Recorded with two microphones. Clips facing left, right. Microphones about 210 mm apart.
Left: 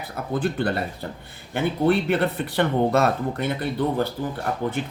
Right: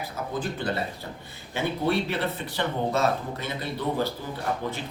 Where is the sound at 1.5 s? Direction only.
55° left (ahead or behind).